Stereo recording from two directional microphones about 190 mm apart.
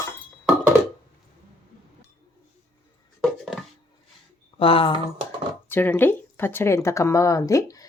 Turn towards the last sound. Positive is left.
turn(degrees=15)  # may be behind; listen again after turning